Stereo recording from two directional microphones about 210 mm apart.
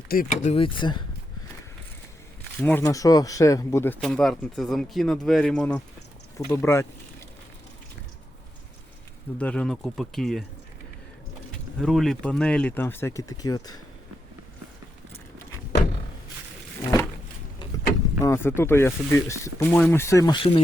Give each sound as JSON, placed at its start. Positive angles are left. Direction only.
{"t": 0.1, "sound": "speech", "side_deg": 40}
{"t": 2.6, "sound": "speech", "side_deg": 5}
{"t": 4.0, "sound": "speech", "side_deg": 0}
{"t": 9.4, "sound": "speech", "side_deg": 5}
{"t": 11.8, "sound": "speech", "side_deg": 0}
{"t": 16.8, "sound": "a sound", "side_deg": 15}
{"t": 18.2, "sound": "speech", "side_deg": 10}